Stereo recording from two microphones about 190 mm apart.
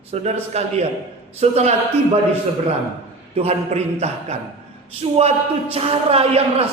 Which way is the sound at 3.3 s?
35° right (ahead or behind).